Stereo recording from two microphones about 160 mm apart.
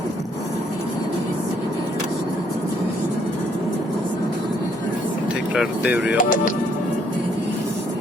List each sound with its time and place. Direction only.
5.5 s speech: 10° right (ahead or behind)
6.1 s speech: 60° left (ahead or behind)